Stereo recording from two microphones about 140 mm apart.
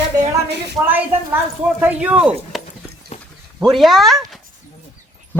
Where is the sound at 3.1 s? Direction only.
50° left (ahead or behind).